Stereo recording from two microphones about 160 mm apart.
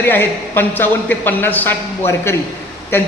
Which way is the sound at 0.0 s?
15° left (ahead or behind).